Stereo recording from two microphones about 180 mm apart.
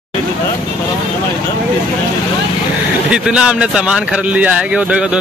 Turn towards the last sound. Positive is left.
turn(degrees=-5)  # may be behind; listen again after turning